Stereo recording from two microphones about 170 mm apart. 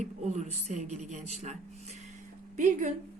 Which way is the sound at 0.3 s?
45° right (ahead or behind).